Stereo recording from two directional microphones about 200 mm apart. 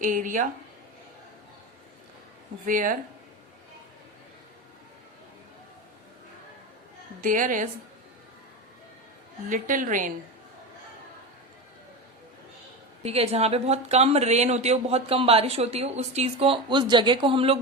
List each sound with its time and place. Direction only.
0.0 s speech: 40° right (ahead or behind)
2.6 s speech: 40° right (ahead or behind)
7.2 s speech: 40° right (ahead or behind)
9.5 s speech: 40° right (ahead or behind)
13.0 s speech: 30° right (ahead or behind)